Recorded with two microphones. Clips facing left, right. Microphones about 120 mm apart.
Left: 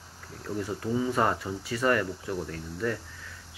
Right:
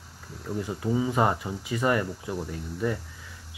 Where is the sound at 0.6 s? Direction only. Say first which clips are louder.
Right 2 dB; 15° right (ahead or behind).